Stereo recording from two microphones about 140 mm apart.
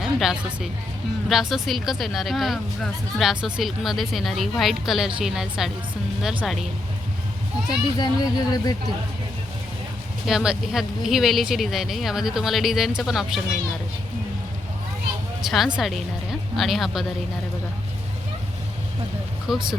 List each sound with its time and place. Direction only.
0.0 s a woman's voice: 5° right (ahead or behind)
7.9 s speech: 30° left (ahead or behind)
10.2 s speech: 5° right (ahead or behind)
15.4 s speech: centre (ahead or behind)
19.5 s speech: centre (ahead or behind)